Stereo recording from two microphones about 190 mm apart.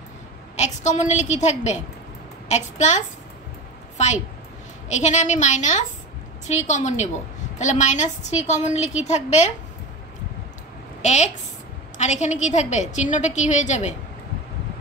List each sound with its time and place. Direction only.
0.6 s a woman's voice: 35° left (ahead or behind)
4.9 s a woman's voice: 40° left (ahead or behind)
11.0 s a woman's voice: 35° left (ahead or behind)